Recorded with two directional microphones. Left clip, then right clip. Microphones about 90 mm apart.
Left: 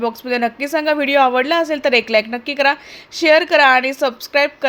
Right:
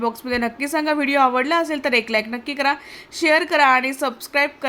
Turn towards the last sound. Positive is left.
turn(degrees=20)  # may be behind; listen again after turning